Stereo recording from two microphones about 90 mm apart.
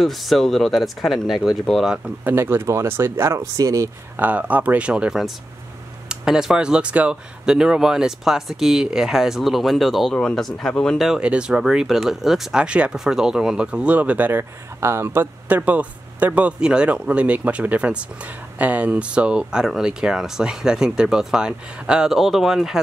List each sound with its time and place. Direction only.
0.0 s speech: centre (ahead or behind)
2.2 s speech: 25° right (ahead or behind)
4.2 s speech: 15° right (ahead or behind); by 11.0 s 10° left (ahead or behind)
11.0 s speech: 5° right (ahead or behind)
14.8 s speech: 30° right (ahead or behind); by 22.8 s 5° right (ahead or behind)